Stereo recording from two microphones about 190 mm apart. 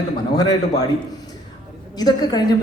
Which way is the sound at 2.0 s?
20° left (ahead or behind).